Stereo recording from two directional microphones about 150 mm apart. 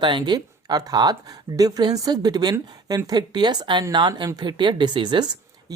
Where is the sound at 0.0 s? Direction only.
30° right (ahead or behind).